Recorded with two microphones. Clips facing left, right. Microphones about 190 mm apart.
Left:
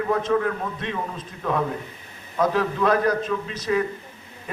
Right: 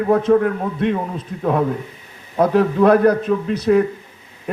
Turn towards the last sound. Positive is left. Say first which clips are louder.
# right 8 dB
turn(degrees=-55)  # may be behind; listen again after turning